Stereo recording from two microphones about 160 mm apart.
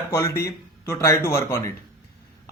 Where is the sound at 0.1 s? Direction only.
20° left (ahead or behind).